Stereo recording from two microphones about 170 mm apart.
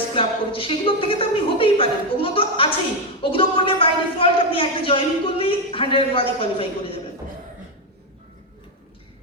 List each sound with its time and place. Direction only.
0.1 s a man's voice: 30° left (ahead or behind)